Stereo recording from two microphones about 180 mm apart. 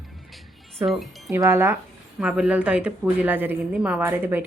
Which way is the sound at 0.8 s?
Centre (ahead or behind).